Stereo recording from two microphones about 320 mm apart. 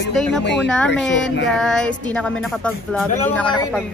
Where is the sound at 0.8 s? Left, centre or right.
Left.